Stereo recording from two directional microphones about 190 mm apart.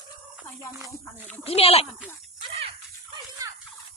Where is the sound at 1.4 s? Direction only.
30° left (ahead or behind).